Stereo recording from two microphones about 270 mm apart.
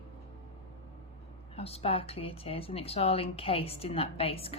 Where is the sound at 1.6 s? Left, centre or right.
Left.